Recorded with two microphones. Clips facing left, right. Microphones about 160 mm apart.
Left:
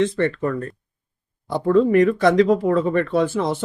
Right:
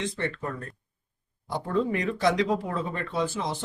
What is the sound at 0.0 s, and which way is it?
Speech, 60° left (ahead or behind).